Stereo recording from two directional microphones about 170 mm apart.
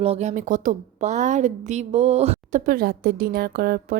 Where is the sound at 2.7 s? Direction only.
60° right (ahead or behind).